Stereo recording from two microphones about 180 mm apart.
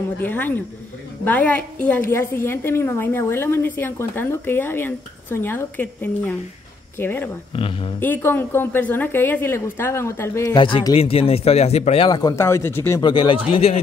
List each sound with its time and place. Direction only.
0.2 s a woman's voice: 10° left (ahead or behind)
7.5 s speech: 30° left (ahead or behind)
8.0 s a woman's voice: 10° left (ahead or behind); by 12.1 s 35° left (ahead or behind)
12.1 s a woman's voice: 20° left (ahead or behind)
13.0 s speech: 25° left (ahead or behind)